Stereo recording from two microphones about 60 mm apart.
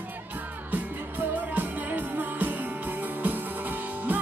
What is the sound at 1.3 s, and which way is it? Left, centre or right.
Music, right.